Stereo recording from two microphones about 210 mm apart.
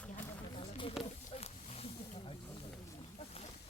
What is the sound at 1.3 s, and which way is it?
Snake, 30° left (ahead or behind).